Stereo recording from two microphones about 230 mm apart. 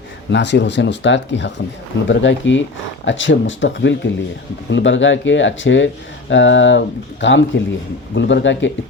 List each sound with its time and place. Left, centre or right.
0.3 s speech: left